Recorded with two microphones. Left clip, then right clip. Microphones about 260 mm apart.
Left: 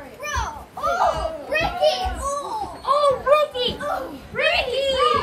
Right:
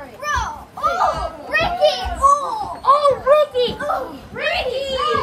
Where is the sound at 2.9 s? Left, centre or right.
Right.